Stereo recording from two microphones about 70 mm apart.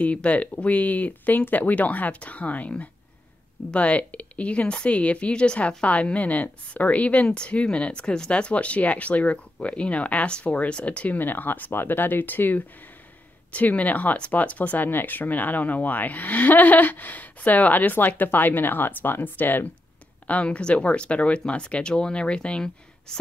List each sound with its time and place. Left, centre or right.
0.0 s speech: centre